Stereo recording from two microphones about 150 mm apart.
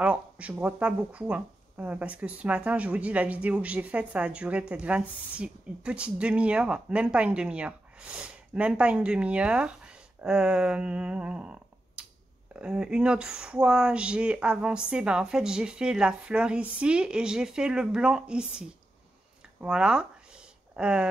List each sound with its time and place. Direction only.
0.0 s speech: 10° right (ahead or behind)
10.2 s finger snapping: 5° right (ahead or behind)
12.5 s speech: 5° right (ahead or behind)